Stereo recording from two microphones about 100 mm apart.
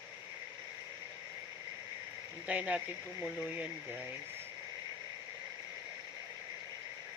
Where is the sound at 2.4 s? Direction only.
15° right (ahead or behind).